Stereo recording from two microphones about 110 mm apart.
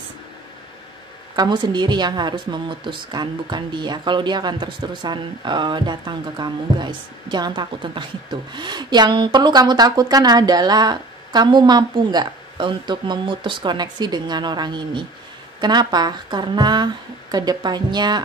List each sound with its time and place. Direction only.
1.3 s a woman's voice: 40° right (ahead or behind)